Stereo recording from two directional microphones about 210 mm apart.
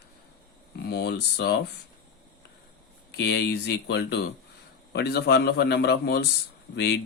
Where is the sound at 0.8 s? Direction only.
50° left (ahead or behind).